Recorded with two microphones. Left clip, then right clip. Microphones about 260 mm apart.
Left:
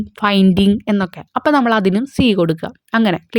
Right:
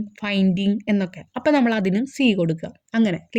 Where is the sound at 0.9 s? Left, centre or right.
Left.